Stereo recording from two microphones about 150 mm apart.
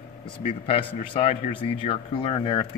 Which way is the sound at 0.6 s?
40° left (ahead or behind).